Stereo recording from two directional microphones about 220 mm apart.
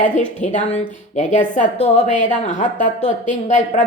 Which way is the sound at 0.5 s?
35° left (ahead or behind).